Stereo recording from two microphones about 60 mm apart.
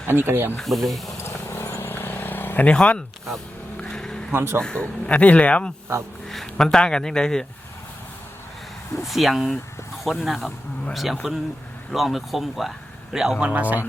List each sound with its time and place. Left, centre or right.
0.1 s speech: right
0.6 s speech: centre
1.2 s vehicle: left
2.6 s speech: centre
3.8 s vehicle: centre
4.4 s speech: right
4.6 s speech: centre
6.2 s speech: centre
9.0 s speech: centre
13.5 s speech: right